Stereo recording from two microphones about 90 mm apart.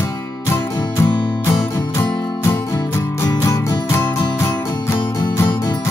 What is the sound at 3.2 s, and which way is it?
Music, 35° left (ahead or behind).